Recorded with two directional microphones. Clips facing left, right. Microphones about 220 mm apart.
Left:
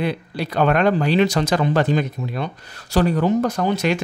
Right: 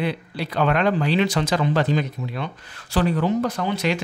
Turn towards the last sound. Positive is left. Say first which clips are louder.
# left 3 dB
turn(degrees=45)  # may be behind; listen again after turning